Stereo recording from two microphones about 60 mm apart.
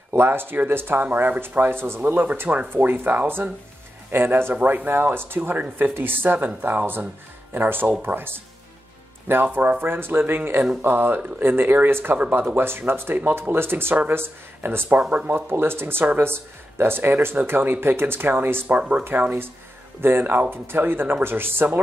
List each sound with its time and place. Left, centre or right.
0.1 s speech: right
15.0 s speech: right
15.3 s speech: right
18.8 s speech: right
19.0 s speech: right